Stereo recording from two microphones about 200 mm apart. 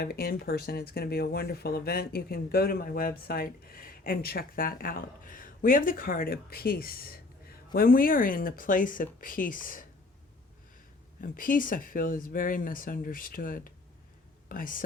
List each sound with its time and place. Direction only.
0.0 s speech: 50° left (ahead or behind)
11.2 s speech: 45° left (ahead or behind)